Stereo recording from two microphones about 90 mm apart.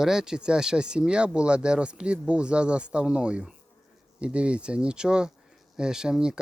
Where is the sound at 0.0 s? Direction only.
5° right (ahead or behind).